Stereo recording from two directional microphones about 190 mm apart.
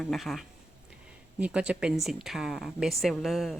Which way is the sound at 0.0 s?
Centre (ahead or behind).